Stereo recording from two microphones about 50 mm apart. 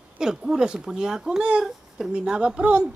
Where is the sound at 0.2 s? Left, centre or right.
Centre.